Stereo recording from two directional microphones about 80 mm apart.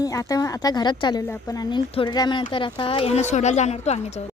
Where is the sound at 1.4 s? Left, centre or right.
Left.